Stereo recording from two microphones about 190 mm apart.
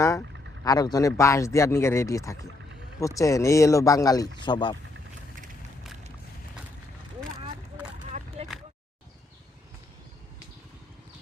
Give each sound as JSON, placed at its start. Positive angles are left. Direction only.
{"t": 0.0, "sound": "vehicle", "side_deg": 15}
{"t": 0.6, "sound": "speech", "side_deg": 20}